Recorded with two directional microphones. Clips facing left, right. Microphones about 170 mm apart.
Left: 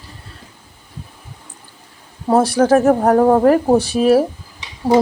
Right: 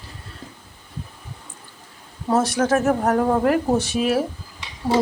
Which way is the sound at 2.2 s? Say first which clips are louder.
Left 6 dB; 35° left (ahead or behind).